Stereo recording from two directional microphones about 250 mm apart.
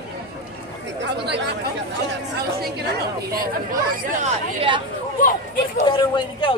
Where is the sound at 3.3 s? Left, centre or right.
Right.